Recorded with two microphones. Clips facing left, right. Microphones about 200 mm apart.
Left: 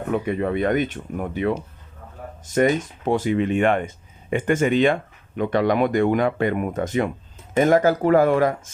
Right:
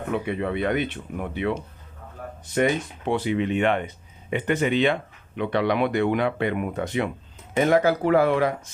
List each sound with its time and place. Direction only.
0.1 s speech: 45° left (ahead or behind)